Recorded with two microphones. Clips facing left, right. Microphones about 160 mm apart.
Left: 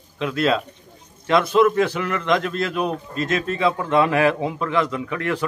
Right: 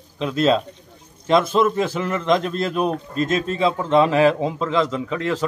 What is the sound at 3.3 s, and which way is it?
A man's voice, 30° right (ahead or behind).